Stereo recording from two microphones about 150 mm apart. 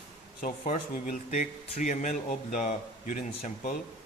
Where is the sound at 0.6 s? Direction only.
50° left (ahead or behind).